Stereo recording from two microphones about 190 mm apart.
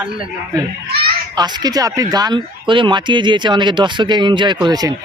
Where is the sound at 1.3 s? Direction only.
20° right (ahead or behind).